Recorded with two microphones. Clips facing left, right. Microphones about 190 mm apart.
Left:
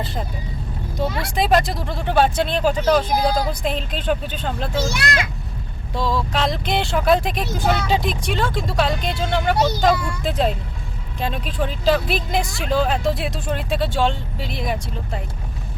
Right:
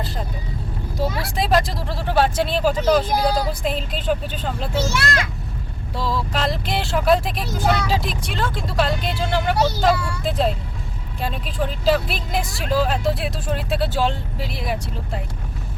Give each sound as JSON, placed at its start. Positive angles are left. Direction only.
{"t": 0.9, "sound": "speech", "side_deg": -5}
{"t": 4.7, "sound": "a child's voice", "side_deg": 15}
{"t": 6.0, "sound": "speech", "side_deg": 0}
{"t": 9.6, "sound": "a child's voice", "side_deg": 15}
{"t": 9.8, "sound": "speech", "side_deg": 0}